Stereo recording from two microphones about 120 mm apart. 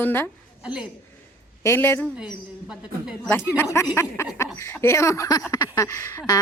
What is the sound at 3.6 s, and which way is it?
A woman's voice, 25° left (ahead or behind).